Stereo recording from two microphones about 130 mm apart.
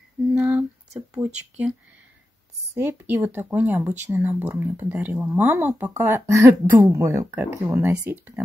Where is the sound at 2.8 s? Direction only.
15° right (ahead or behind).